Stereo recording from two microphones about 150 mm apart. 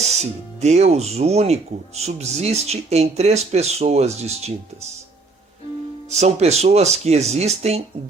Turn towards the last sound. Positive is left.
turn(degrees=-45)  # may be behind; listen again after turning